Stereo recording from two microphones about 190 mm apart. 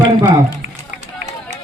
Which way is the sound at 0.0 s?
20° right (ahead or behind).